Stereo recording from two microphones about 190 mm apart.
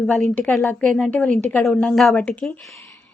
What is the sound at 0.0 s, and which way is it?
Speech, centre (ahead or behind).